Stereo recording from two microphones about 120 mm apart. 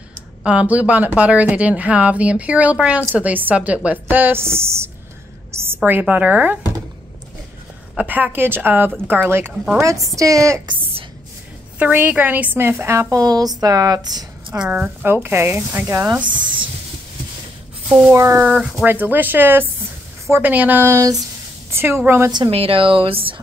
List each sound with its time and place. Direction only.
0.4 s a woman's voice: 10° right (ahead or behind)
7.9 s a woman's voice: 10° right (ahead or behind)
11.8 s a woman's voice: 15° right (ahead or behind); by 14.6 s 30° right (ahead or behind)
14.6 s a woman's voice: 10° right (ahead or behind)
18.1 s a woman's voice: 25° right (ahead or behind)
22.5 s speech: 50° right (ahead or behind)